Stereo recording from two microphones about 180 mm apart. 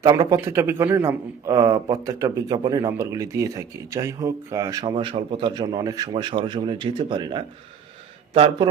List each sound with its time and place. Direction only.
0.0 s a man's voice: 20° right (ahead or behind)